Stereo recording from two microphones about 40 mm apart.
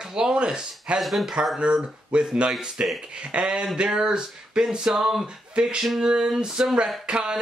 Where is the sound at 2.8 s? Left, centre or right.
Right.